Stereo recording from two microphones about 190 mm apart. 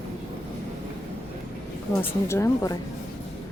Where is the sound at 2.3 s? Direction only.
15° left (ahead or behind).